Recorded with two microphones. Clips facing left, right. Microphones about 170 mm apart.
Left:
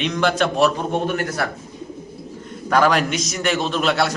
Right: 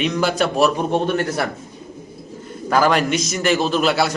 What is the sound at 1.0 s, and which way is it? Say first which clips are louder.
Speech: right 2 dB; 30° right (ahead or behind).